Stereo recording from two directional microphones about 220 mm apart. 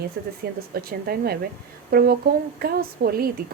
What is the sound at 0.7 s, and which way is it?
A woman's voice, 45° right (ahead or behind).